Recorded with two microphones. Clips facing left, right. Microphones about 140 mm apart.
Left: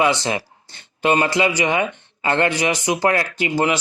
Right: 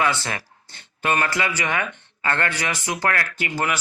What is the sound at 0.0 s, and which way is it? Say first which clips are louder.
Speech: left 5 dB; 20° left (ahead or behind).